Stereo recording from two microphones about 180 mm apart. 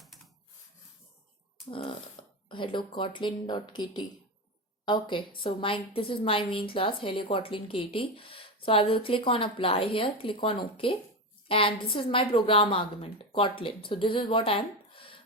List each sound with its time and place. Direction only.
2.5 s a woman's voice: 25° left (ahead or behind)